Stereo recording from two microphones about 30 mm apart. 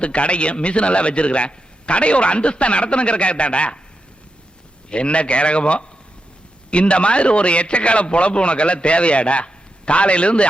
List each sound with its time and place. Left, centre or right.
0.0 s a man's voice: left
4.9 s a man's voice: left